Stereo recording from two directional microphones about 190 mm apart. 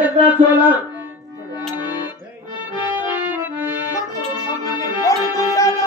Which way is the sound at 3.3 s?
10° right (ahead or behind).